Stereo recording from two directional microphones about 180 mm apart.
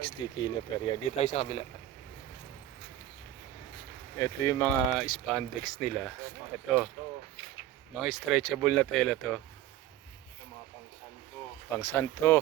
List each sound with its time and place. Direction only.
0.0 s speech: 30° left (ahead or behind)
4.2 s speech: 15° left (ahead or behind)
4.9 s speech: centre (ahead or behind)
7.9 s speech: centre (ahead or behind)
11.8 s speech: 15° left (ahead or behind)